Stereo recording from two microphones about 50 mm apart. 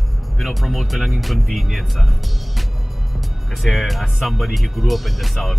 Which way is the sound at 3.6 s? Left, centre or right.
Centre.